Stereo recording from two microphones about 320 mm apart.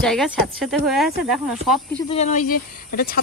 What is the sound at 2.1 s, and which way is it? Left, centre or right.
Speech, left.